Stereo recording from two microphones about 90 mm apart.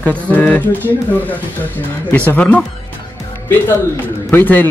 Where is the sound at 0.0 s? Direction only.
20° left (ahead or behind).